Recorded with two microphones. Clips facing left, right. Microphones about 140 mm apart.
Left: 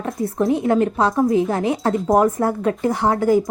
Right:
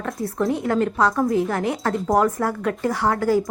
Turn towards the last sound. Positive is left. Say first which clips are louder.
# left 3 dB
turn(degrees=20)  # may be behind; listen again after turning